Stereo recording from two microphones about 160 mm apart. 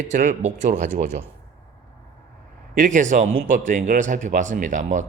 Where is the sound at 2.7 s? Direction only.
55° right (ahead or behind).